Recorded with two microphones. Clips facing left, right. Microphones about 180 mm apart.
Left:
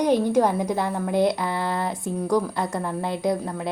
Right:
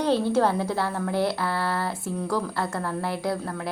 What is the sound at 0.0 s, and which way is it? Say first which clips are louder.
A woman's voice: left 2 dB; 15° left (ahead or behind).